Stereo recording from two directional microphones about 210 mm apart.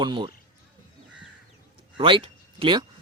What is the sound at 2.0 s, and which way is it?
Speech, 25° right (ahead or behind).